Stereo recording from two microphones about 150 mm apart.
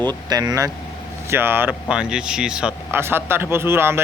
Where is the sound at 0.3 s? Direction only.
25° right (ahead or behind).